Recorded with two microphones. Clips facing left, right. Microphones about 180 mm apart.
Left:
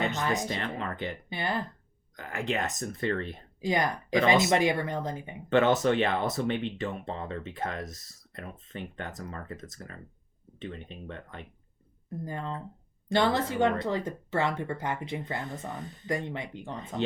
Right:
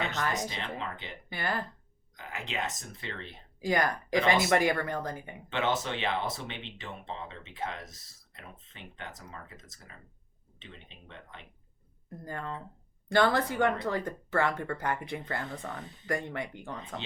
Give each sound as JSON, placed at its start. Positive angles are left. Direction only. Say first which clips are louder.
{"t": 0.4, "sound": "speech", "louder": "left 4 dB", "side_deg": 50}
{"t": 1.3, "sound": "speech", "louder": "even", "side_deg": 20}
{"t": 2.1, "sound": "speech", "louder": "left 6 dB", "side_deg": 50}
{"t": 3.6, "sound": "speech", "louder": "left 1 dB", "side_deg": 20}
{"t": 5.5, "sound": "speech", "louder": "left 8 dB", "side_deg": 50}
{"t": 12.2, "sound": "speech", "louder": "left 2 dB", "side_deg": 20}